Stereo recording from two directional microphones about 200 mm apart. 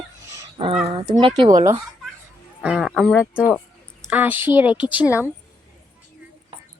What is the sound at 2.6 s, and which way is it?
Speech, 5° right (ahead or behind).